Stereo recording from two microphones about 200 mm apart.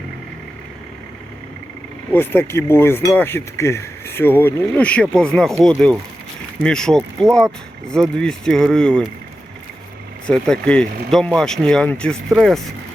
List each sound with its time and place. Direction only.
2.1 s speech: 10° left (ahead or behind)
6.6 s speech: 5° left (ahead or behind)
10.2 s speech: 5° left (ahead or behind)